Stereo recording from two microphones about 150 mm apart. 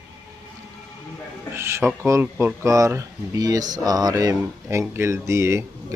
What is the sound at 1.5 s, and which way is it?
Speech, 15° right (ahead or behind).